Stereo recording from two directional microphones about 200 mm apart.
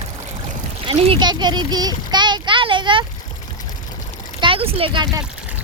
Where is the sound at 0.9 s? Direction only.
25° right (ahead or behind).